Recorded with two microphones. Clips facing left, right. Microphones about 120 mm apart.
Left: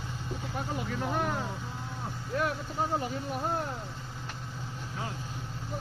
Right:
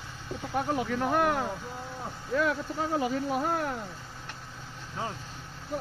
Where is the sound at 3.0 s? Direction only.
90° right.